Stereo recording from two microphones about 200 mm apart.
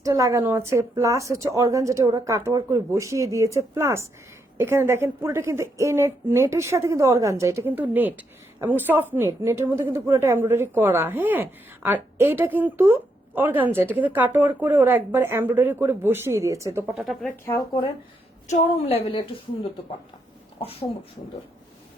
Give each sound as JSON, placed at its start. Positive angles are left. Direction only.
{"t": 0.0, "sound": "a woman's voice", "side_deg": -15}
{"t": 17.4, "sound": "speech", "side_deg": 15}
{"t": 18.4, "sound": "a woman's voice", "side_deg": 30}
{"t": 20.6, "sound": "speech", "side_deg": 30}